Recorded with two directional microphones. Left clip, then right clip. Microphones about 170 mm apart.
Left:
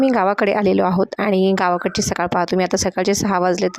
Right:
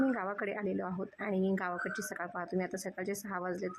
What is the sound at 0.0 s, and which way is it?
A woman's voice, 70° left (ahead or behind).